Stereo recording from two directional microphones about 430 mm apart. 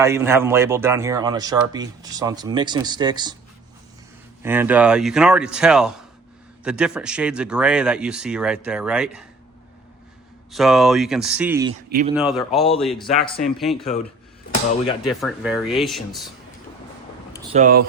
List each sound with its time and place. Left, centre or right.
0.0 s speech: centre
4.4 s speech: centre
10.5 s speech: centre
11.9 s speech: centre
12.1 s speech: centre
13.2 s speech: centre
15.0 s speech: centre
17.5 s speech: centre